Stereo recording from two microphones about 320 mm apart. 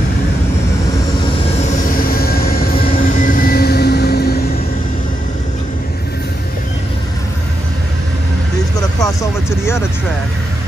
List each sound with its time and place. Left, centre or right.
1.9 s vehicle: left